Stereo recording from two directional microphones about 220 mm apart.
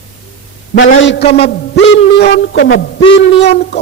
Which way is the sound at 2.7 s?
55° left (ahead or behind).